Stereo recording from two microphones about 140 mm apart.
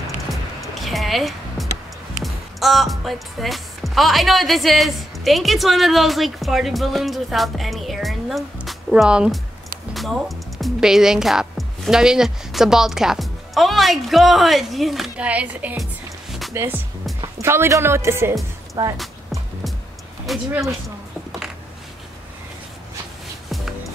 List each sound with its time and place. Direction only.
0.3 s music: centre (ahead or behind)
2.2 s speech: centre (ahead or behind)
15.8 s music: centre (ahead or behind)
16.5 s a woman's voice: 15° right (ahead or behind)
18.9 s music: centre (ahead or behind)
20.3 s speech: centre (ahead or behind)